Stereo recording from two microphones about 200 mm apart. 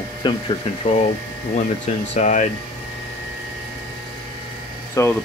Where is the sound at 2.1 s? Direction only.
35° left (ahead or behind).